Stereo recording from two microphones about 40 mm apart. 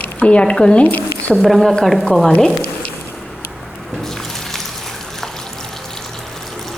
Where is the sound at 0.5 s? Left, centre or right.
Left.